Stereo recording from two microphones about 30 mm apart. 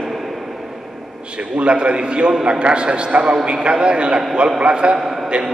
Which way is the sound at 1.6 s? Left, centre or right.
Right.